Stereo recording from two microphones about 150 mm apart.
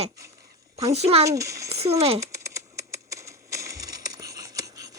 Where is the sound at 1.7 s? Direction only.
45° right (ahead or behind).